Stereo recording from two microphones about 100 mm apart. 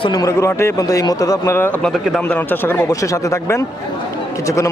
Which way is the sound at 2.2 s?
20° left (ahead or behind).